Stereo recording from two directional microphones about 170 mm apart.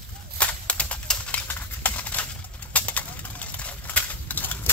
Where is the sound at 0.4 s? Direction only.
5° left (ahead or behind).